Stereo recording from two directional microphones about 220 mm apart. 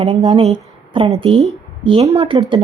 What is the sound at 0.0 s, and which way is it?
A woman's voice, 25° right (ahead or behind).